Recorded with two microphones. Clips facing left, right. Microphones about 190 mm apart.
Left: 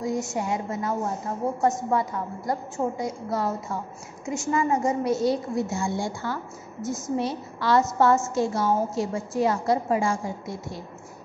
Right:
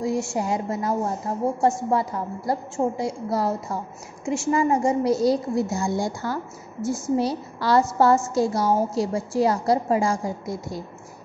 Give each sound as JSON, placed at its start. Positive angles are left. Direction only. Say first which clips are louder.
{"t": 0.0, "sound": "a woman's voice", "louder": "right 3 dB", "side_deg": -30}